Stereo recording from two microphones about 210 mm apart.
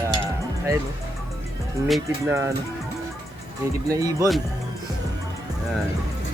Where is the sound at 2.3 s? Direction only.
15° right (ahead or behind).